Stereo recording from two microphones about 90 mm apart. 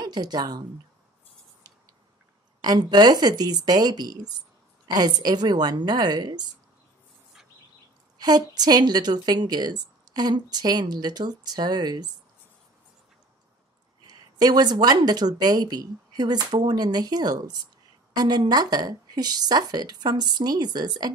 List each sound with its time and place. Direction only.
0.0 s speech: 50° right (ahead or behind)
2.6 s a woman's voice: 50° right (ahead or behind)
8.2 s a woman's voice: 50° right (ahead or behind)
14.0 s a sound: 50° right (ahead or behind)
15.0 s a woman's voice: 50° right (ahead or behind)